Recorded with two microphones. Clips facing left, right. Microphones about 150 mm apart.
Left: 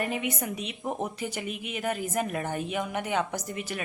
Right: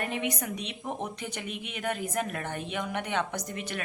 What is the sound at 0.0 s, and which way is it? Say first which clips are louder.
A woman's voice: left 2 dB; 5° left (ahead or behind).